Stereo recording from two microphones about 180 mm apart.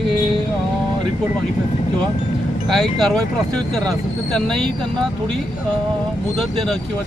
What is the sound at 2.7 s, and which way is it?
Speech, centre (ahead or behind).